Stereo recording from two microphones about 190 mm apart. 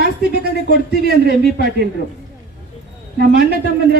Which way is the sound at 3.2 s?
55° right (ahead or behind).